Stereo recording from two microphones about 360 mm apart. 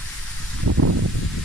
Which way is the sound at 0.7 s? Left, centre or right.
Right.